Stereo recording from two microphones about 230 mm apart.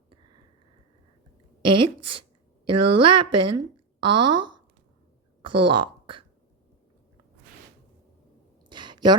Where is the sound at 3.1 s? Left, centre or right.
Right.